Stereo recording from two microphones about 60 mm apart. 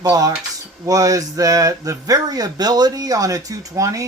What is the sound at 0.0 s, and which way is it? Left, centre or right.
Speech, right.